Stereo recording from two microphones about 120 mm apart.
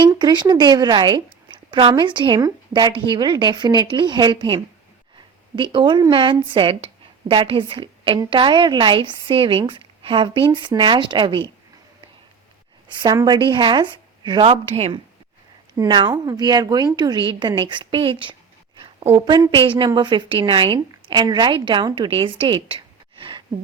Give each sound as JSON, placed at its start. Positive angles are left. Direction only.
{"t": 0.1, "sound": "a woman's voice", "side_deg": -35}
{"t": 13.2, "sound": "speech", "side_deg": -40}
{"t": 14.4, "sound": "a woman's voice", "side_deg": -50}
{"t": 15.9, "sound": "speech", "side_deg": -40}
{"t": 18.8, "sound": "a sound", "side_deg": -50}
{"t": 19.2, "sound": "a woman's voice", "side_deg": -35}